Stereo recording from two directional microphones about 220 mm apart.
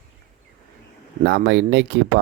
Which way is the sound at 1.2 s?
50° right (ahead or behind).